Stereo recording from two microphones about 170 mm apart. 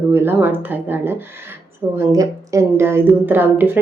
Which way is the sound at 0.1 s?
15° right (ahead or behind).